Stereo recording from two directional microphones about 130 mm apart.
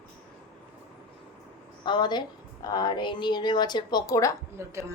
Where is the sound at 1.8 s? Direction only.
35° left (ahead or behind).